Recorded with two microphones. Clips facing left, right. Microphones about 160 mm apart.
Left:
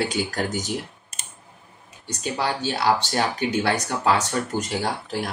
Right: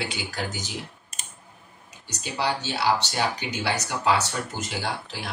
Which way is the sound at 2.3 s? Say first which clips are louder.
Left 1 dB; 50° left (ahead or behind).